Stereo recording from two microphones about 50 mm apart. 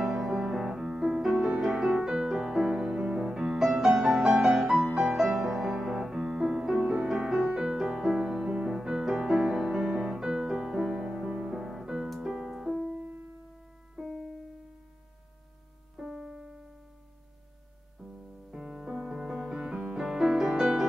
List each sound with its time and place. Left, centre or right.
0.0 s music: centre
4.7 s music: centre
12.9 s music: right
14.0 s music: centre
16.0 s music: centre
18.0 s music: centre